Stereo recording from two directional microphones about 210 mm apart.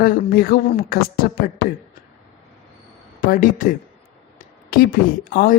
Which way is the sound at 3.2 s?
40° left (ahead or behind).